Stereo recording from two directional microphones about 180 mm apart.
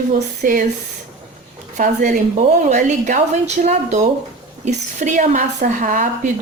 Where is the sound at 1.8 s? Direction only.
50° right (ahead or behind).